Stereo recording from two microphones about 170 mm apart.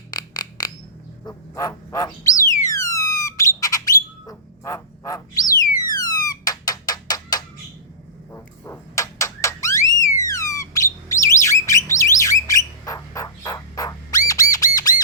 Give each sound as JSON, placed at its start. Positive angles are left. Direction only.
{"t": 0.1, "sound": "a sound", "side_deg": 25}
{"t": 1.2, "sound": "bird", "side_deg": 20}
{"t": 5.9, "sound": "cat", "side_deg": 20}
{"t": 8.3, "sound": "a sound", "side_deg": 15}
{"t": 10.2, "sound": "bird", "side_deg": 20}
{"t": 14.8, "sound": "squawk", "side_deg": 20}